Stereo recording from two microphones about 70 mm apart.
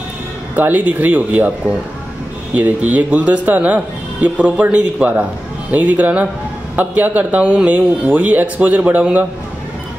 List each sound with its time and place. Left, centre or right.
0.6 s speech: right
2.5 s speech: right